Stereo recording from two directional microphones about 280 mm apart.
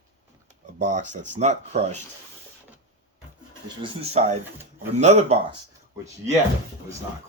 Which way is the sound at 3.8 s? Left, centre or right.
Right.